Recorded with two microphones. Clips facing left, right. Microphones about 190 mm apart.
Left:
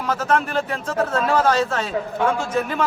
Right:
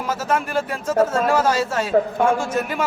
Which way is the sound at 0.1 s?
10° right (ahead or behind).